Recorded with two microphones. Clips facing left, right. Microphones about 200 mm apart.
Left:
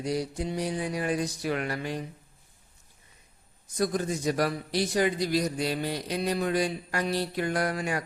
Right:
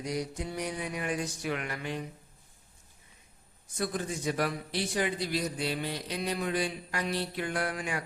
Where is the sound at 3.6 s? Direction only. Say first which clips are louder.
Left 5 dB; 40° left (ahead or behind).